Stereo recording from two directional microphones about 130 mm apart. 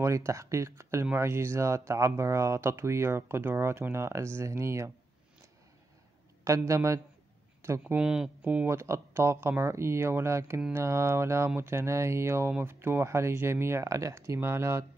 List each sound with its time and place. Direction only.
0.0 s speech: 20° right (ahead or behind)
6.4 s speech: 25° right (ahead or behind)